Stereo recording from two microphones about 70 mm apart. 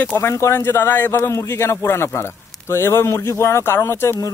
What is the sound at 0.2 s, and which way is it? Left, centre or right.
Speech, left.